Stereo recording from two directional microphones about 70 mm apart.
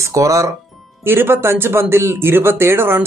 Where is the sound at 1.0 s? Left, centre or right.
Right.